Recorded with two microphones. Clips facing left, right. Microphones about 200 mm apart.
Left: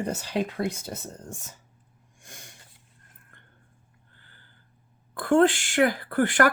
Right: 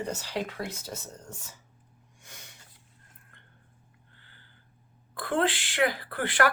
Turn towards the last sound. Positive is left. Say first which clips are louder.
# left 5 dB
turn(degrees=45)  # may be behind; listen again after turning